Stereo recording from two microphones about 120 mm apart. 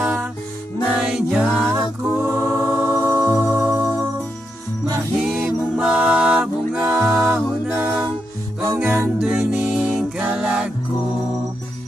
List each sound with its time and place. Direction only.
0.0 s music: 10° right (ahead or behind)
5.2 s music: 5° right (ahead or behind)
7.6 s music: 20° right (ahead or behind)